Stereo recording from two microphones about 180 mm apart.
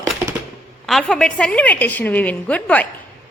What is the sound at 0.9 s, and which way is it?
A woman's voice, centre (ahead or behind).